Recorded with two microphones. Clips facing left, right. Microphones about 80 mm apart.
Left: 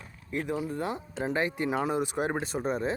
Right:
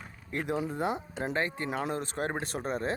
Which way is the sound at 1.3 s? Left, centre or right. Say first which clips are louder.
Left 4 dB; centre.